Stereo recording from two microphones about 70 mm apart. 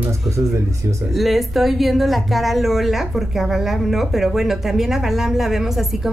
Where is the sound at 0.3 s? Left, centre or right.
Right.